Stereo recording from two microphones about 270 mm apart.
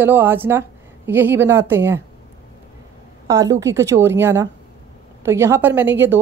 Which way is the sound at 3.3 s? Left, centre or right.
Centre.